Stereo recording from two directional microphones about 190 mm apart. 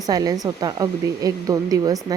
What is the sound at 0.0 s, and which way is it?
Speech, 20° right (ahead or behind).